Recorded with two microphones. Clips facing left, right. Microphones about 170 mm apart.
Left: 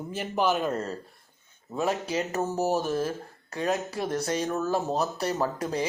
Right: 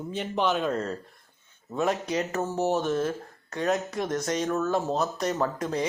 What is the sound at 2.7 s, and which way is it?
Speech, 10° left (ahead or behind).